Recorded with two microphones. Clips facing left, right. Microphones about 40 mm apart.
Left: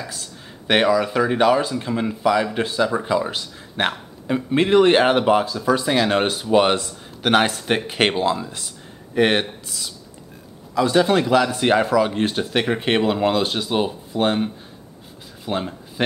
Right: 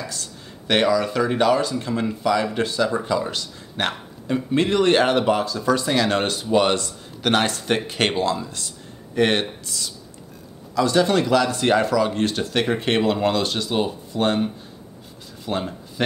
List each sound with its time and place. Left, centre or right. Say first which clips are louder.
0.0 s speech: even; centre